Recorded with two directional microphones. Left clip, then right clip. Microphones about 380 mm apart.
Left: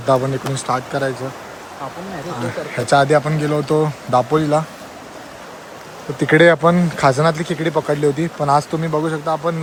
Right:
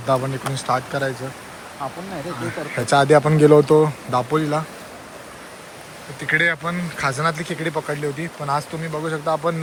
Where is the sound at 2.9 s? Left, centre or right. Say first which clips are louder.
Left 1 dB; centre.